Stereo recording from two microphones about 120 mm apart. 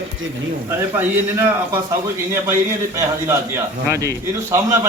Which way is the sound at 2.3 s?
20° right (ahead or behind).